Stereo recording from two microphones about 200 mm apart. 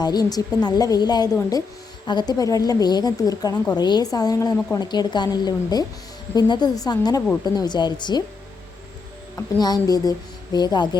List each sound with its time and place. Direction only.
0.0 s a woman's voice: 20° left (ahead or behind)
9.6 s a woman's voice: 20° left (ahead or behind)